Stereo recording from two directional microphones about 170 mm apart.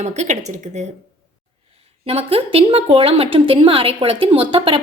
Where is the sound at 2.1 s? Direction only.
35° right (ahead or behind).